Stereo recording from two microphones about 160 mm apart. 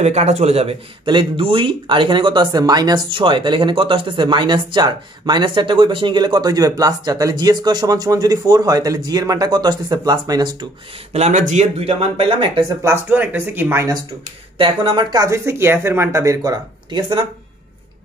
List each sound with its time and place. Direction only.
0.0 s speech: 45° right (ahead or behind); by 10.7 s 25° right (ahead or behind)
11.1 s speech: 45° right (ahead or behind)
12.8 s speech: 15° right (ahead or behind)
14.6 s speech: 30° right (ahead or behind)